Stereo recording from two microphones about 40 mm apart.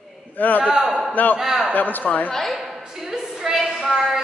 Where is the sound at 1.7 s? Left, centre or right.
Left.